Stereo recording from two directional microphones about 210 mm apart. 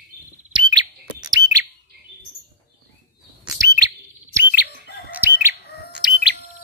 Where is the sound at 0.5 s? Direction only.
20° right (ahead or behind).